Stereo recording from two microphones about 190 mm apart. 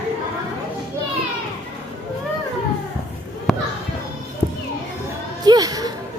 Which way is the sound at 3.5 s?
Centre (ahead or behind).